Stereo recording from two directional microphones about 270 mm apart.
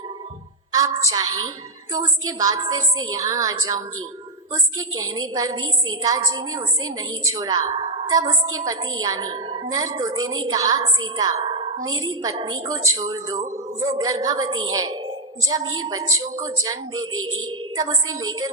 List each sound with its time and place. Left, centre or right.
0.8 s a woman's voice: centre
11.2 s a sound: centre
11.9 s a woman's voice: centre